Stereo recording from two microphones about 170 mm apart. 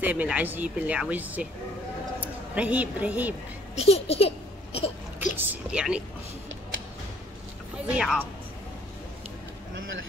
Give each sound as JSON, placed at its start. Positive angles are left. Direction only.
{"t": 0.0, "sound": "speech", "side_deg": -10}
{"t": 3.7, "sound": "speech", "side_deg": 35}
{"t": 4.7, "sound": "a sound", "side_deg": 35}
{"t": 5.4, "sound": "speech", "side_deg": -10}
{"t": 7.9, "sound": "speech", "side_deg": -5}
{"t": 9.8, "sound": "speech", "side_deg": -90}